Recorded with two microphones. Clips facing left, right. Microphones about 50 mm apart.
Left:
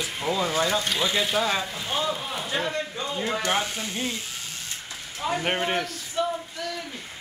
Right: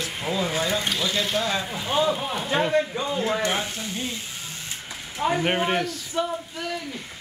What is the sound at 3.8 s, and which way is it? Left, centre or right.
Speech, centre.